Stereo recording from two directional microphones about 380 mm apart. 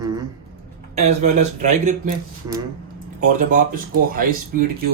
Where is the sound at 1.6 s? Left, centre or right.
Centre.